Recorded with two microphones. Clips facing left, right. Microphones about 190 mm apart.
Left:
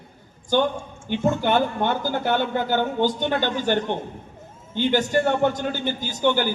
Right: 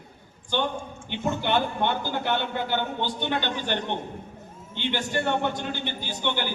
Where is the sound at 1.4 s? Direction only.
45° left (ahead or behind).